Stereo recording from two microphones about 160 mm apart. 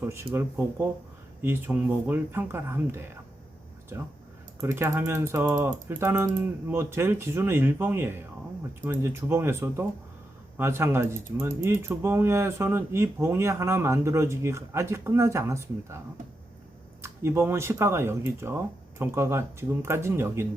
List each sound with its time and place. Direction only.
0.0 s speech: 15° right (ahead or behind)
4.6 s speech: 15° right (ahead or behind)
17.0 s speech: 15° right (ahead or behind)